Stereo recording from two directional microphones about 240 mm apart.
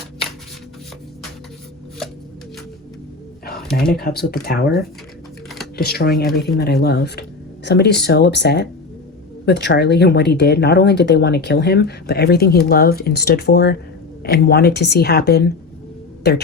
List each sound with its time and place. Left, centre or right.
3.9 s a woman's voice: left